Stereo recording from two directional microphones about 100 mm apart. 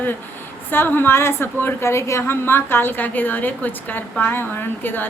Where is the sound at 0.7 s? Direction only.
20° left (ahead or behind).